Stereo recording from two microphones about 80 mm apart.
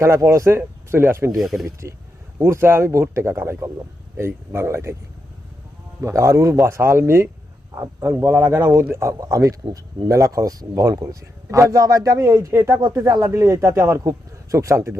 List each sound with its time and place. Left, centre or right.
0.0 s a man's voice: right
1.4 s speech: centre
1.6 s a man's voice: right
6.0 s a man's voice: right
13.1 s a man's voice: right